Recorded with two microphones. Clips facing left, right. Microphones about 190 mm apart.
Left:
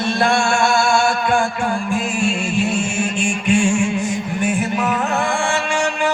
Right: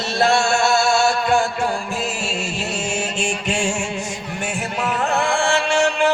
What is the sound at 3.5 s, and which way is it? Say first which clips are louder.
Music: left 8 dB; 50° left (ahead or behind).